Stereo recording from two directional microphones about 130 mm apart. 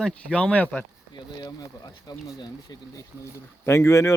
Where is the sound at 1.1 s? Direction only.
30° left (ahead or behind).